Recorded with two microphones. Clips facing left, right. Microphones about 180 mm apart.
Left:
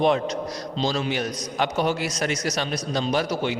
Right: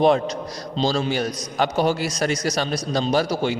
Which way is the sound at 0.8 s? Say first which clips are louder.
Right 3 dB; 30° right (ahead or behind).